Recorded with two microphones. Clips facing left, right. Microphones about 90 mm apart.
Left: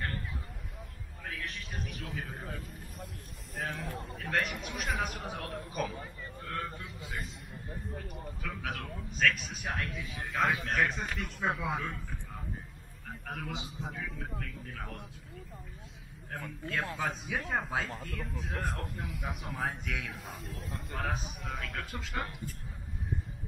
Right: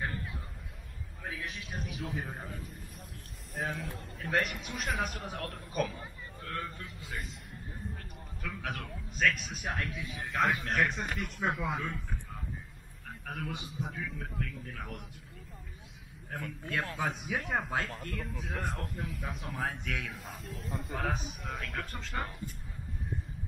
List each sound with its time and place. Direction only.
1.2 s a sound: 5° right (ahead or behind)
3.5 s speech: centre (ahead or behind)
13.3 s a man's voice: 20° left (ahead or behind)
13.9 s speech: 5° left (ahead or behind)
16.3 s speech: 5° right (ahead or behind)